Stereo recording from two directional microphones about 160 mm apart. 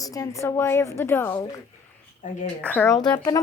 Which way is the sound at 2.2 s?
55° left (ahead or behind).